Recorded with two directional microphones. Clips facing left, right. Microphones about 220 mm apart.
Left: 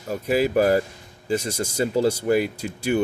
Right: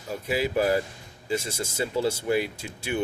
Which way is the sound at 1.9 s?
45° left (ahead or behind).